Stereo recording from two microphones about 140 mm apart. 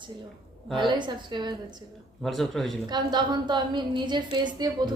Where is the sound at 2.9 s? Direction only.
30° right (ahead or behind).